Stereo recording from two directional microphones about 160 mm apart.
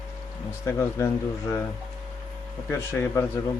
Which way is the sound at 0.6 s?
20° left (ahead or behind).